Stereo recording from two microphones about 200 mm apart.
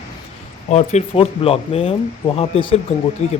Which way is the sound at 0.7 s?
35° left (ahead or behind).